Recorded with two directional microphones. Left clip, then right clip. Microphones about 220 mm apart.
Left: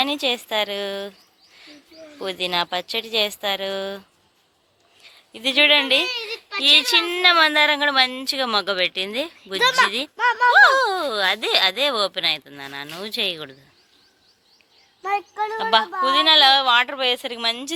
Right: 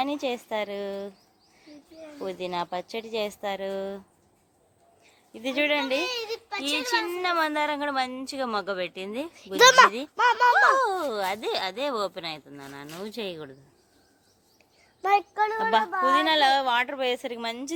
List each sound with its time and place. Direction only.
0.0 s speech: centre (ahead or behind)
2.1 s speech: centre (ahead or behind)
5.1 s speech: centre (ahead or behind)
6.1 s a child's voice: 60° right (ahead or behind)
6.6 s speech: centre (ahead or behind)
9.6 s speech: 50° right (ahead or behind)
10.2 s speech: 35° right (ahead or behind)
10.7 s speech: 5° right (ahead or behind)
15.5 s a woman's voice: 10° right (ahead or behind)